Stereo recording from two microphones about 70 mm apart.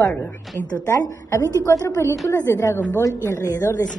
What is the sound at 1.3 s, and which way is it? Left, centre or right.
Speech, left.